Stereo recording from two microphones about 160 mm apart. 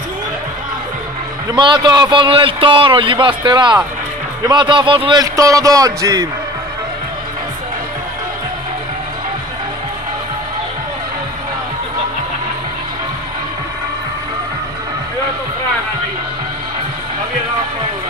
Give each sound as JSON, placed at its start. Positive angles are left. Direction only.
{"t": 1.5, "sound": "a man's voice", "side_deg": -30}